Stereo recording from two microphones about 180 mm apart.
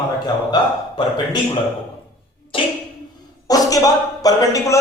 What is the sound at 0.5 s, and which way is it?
Speech, 25° left (ahead or behind).